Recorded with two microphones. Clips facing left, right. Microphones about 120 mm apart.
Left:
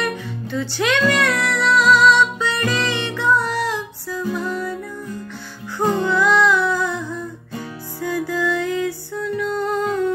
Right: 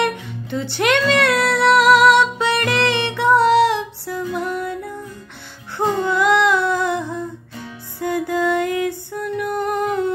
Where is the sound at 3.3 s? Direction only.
70° right (ahead or behind).